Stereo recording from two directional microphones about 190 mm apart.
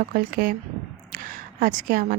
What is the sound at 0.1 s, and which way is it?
A woman's voice, 45° right (ahead or behind).